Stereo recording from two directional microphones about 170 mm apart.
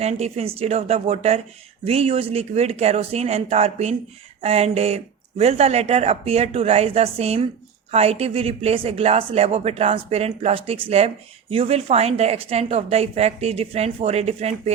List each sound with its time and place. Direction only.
0.0 s a woman's voice: 35° right (ahead or behind)